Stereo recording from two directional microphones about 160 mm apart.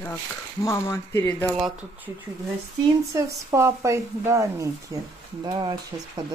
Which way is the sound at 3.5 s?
15° right (ahead or behind).